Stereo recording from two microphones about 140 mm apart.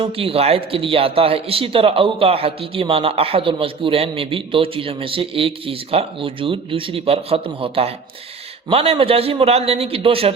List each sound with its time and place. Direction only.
0.0 s a man's voice: 40° right (ahead or behind)